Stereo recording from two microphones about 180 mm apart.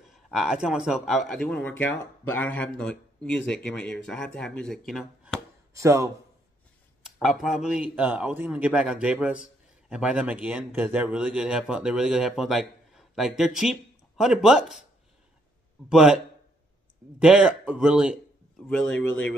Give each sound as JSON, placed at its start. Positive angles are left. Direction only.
{"t": 0.1, "sound": "a man's voice", "side_deg": 0}
{"t": 5.7, "sound": "speech", "side_deg": -15}
{"t": 7.2, "sound": "a man's voice", "side_deg": 0}
{"t": 15.9, "sound": "a man's voice", "side_deg": -5}
{"t": 17.2, "sound": "a man's voice", "side_deg": -5}
{"t": 18.7, "sound": "a man's voice", "side_deg": 5}